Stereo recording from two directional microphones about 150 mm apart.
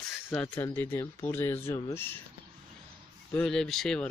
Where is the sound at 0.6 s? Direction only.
15° left (ahead or behind).